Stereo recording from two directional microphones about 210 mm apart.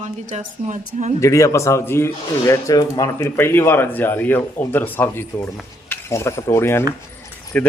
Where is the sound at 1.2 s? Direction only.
15° left (ahead or behind).